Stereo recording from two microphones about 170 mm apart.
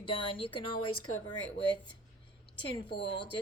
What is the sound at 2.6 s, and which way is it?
Speech, 30° left (ahead or behind).